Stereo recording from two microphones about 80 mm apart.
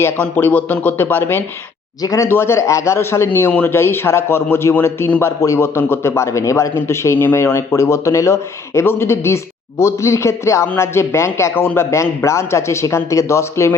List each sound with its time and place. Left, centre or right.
0.0 s speech: left
2.0 s speech: left
2.3 s a man's voice: left
5.2 s a man's voice: left